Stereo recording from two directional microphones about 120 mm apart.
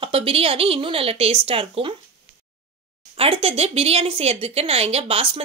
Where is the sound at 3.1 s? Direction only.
55° right (ahead or behind).